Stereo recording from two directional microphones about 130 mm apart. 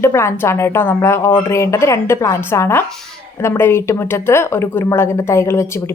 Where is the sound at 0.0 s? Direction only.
20° left (ahead or behind).